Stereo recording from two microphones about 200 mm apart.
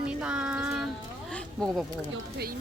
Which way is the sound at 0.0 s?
5° right (ahead or behind).